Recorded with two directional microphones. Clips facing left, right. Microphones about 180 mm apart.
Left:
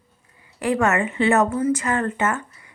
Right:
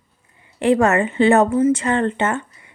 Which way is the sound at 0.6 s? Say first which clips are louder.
Right 5 dB; 30° right (ahead or behind).